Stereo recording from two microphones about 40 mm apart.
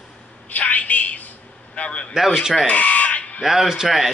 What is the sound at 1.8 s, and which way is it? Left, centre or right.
Speech, left.